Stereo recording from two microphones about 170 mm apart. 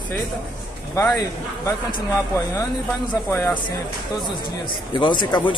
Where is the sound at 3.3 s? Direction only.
15° left (ahead or behind).